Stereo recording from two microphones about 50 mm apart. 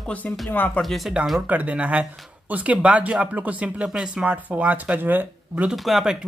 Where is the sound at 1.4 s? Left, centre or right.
Right.